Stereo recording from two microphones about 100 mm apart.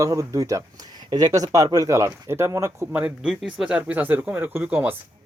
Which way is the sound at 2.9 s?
10° right (ahead or behind).